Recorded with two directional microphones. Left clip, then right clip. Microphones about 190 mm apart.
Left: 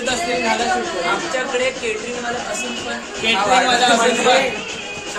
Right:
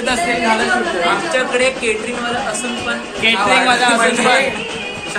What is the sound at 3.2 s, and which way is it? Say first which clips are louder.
Speech: right 2 dB; 10° right (ahead or behind).